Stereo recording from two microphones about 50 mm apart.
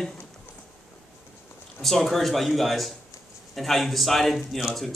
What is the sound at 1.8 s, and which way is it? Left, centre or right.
Speech, centre.